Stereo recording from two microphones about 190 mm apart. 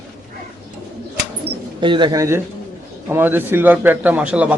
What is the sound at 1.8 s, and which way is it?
Speech, 25° right (ahead or behind).